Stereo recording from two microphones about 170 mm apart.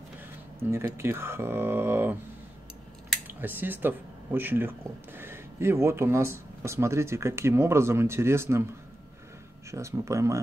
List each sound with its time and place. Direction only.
0.7 s speech: 15° right (ahead or behind)
3.3 s speech: 10° right (ahead or behind)
9.7 s speech: 15° right (ahead or behind)